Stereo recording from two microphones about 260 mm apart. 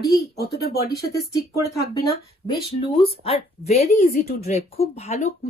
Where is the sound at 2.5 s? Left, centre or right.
Left.